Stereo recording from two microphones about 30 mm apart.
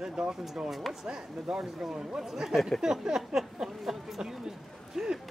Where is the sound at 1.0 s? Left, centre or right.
Right.